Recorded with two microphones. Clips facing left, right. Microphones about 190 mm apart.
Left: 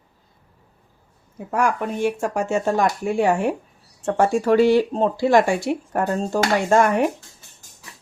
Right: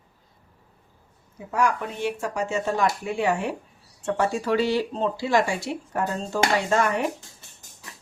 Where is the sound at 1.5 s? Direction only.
50° left (ahead or behind).